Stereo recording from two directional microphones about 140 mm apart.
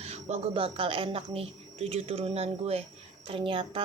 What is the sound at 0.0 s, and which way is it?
A woman's voice, 50° right (ahead or behind).